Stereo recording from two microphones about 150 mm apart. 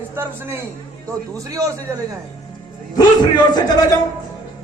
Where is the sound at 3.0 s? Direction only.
30° left (ahead or behind).